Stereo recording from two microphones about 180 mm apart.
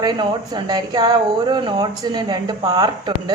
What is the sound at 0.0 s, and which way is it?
Speech, 25° right (ahead or behind).